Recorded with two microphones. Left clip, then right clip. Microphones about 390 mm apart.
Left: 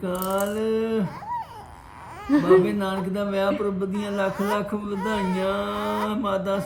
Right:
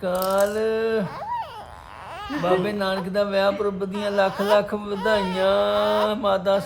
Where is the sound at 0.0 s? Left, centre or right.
Right.